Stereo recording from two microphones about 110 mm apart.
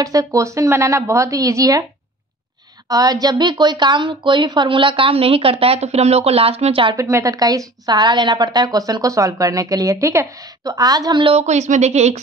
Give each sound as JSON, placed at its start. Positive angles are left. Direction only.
{"t": 0.0, "sound": "speech", "side_deg": -30}
{"t": 2.9, "sound": "a woman's voice", "side_deg": -35}
{"t": 7.0, "sound": "a woman's voice", "side_deg": -25}
{"t": 11.3, "sound": "speech", "side_deg": -90}